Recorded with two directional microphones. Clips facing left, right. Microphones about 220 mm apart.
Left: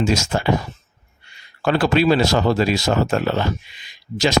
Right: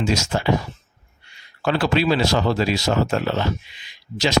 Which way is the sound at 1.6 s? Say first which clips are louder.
Left 3 dB; 50° left (ahead or behind).